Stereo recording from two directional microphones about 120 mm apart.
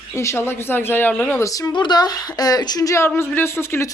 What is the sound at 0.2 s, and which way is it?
Speech, 20° left (ahead or behind).